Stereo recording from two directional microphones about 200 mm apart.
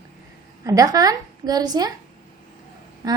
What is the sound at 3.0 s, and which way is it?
Speech, 20° right (ahead or behind).